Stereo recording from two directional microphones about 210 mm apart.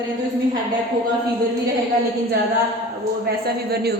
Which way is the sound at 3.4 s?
50° right (ahead or behind).